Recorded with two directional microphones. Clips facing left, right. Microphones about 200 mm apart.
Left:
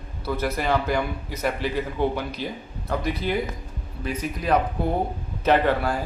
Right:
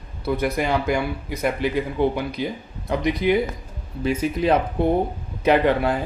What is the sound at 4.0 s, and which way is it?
Speech, 25° right (ahead or behind).